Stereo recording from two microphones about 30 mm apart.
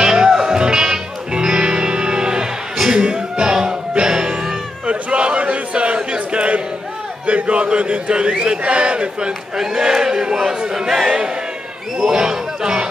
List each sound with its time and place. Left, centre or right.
0.0 s music: right
4.8 s a sound: right
7.2 s a man's voice: right
9.6 s speech: centre